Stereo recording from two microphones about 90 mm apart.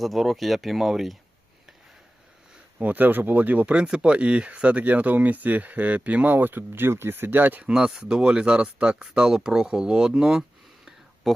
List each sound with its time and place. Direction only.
0.0 s speech: centre (ahead or behind)
2.7 s speech: 20° right (ahead or behind)
7.7 s speech: 5° right (ahead or behind)